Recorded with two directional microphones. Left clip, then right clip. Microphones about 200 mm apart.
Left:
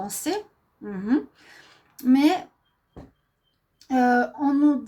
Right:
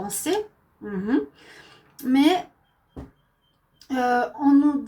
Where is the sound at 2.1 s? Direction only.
45° left (ahead or behind).